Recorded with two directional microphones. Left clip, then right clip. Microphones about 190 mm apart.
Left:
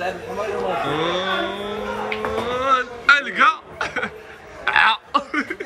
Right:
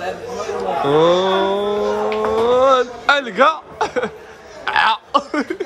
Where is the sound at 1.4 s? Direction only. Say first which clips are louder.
Right 8 dB; 30° right (ahead or behind).